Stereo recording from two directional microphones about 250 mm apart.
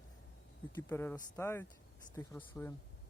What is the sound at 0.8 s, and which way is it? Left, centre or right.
Speech, centre.